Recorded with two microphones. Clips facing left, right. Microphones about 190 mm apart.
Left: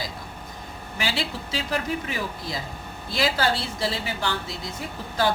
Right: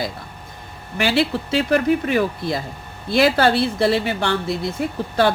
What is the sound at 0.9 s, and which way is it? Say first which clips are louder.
Speech: right 10 dB; 65° right (ahead or behind).